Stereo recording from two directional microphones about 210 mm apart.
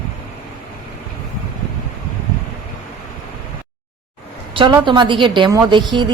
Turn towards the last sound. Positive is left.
turn(degrees=-20)  # may be behind; listen again after turning